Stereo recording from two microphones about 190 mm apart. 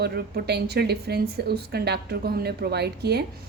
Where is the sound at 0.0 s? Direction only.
60° right (ahead or behind).